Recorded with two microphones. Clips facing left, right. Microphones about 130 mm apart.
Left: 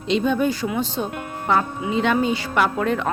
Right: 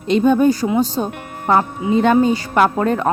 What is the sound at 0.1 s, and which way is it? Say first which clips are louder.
A woman's voice: right 7 dB; 45° right (ahead or behind).